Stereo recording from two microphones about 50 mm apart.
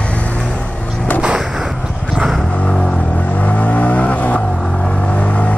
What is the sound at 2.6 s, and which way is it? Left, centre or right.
Vehicle, centre.